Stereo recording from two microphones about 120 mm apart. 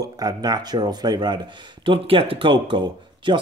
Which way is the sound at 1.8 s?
50° right (ahead or behind).